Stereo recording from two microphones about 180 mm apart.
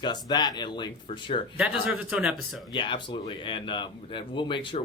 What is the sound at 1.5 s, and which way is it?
Speech, 10° right (ahead or behind).